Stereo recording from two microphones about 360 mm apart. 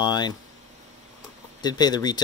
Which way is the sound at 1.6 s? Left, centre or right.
Centre.